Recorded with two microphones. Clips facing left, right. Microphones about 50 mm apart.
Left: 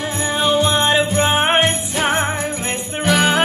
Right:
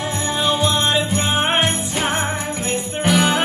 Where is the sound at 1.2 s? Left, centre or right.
Left.